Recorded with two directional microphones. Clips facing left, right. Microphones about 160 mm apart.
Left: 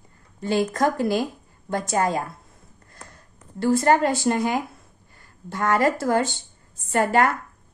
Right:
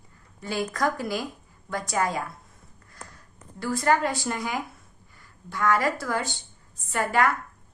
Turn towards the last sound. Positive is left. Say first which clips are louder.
# left 5 dB
turn(degrees=35)  # may be behind; listen again after turning